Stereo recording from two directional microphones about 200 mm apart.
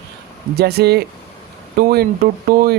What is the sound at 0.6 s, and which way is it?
Speech, 55° right (ahead or behind).